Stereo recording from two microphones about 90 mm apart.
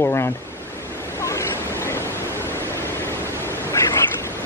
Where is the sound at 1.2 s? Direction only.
35° left (ahead or behind).